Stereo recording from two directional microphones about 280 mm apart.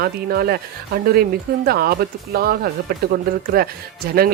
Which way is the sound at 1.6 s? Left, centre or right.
Right.